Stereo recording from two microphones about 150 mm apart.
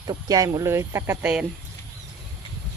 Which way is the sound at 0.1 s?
25° right (ahead or behind).